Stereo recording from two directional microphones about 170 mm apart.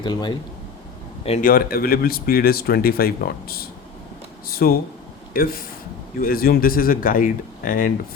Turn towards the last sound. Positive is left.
turn(degrees=55)  # may be behind; listen again after turning